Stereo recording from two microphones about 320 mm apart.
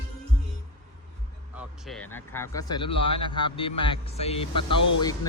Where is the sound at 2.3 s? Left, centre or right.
Centre.